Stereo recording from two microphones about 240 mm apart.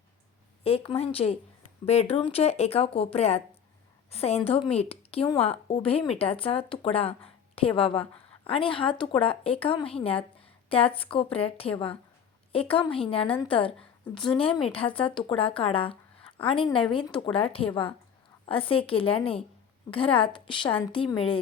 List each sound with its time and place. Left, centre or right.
0.6 s a woman's voice: left